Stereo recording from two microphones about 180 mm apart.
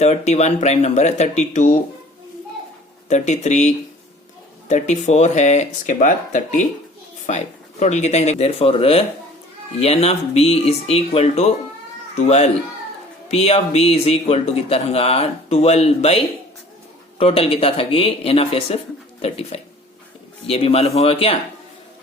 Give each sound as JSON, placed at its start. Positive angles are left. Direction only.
{"t": 0.0, "sound": "speech", "side_deg": 40}
{"t": 3.1, "sound": "speech", "side_deg": 40}
{"t": 4.7, "sound": "speech", "side_deg": 40}